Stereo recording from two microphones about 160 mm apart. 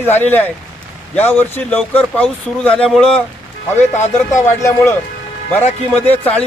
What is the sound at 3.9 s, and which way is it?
Speech, 45° left (ahead or behind).